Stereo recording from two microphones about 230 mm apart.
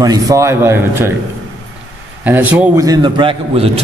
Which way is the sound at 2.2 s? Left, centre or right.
Centre.